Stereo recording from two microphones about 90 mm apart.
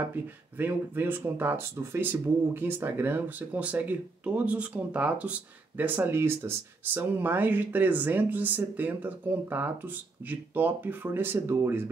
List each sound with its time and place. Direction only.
0.1 s speech: 20° right (ahead or behind)